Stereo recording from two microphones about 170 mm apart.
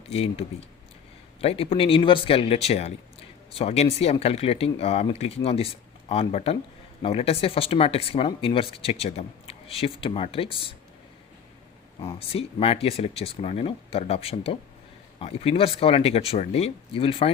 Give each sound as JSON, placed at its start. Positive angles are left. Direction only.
{"t": 0.1, "sound": "speech", "side_deg": 35}
{"t": 11.9, "sound": "speech", "side_deg": 30}